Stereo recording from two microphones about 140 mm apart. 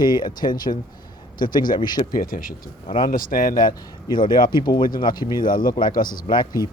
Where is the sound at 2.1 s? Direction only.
90° left.